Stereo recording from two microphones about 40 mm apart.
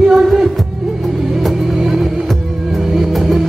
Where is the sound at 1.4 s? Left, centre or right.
Centre.